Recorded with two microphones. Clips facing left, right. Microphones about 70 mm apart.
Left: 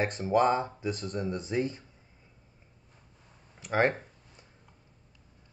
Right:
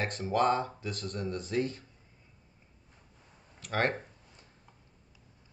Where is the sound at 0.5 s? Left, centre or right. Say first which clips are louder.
Left 2 dB; centre.